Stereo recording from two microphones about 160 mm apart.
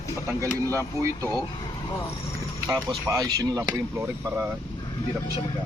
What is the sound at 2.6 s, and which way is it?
Speech, 20° right (ahead or behind).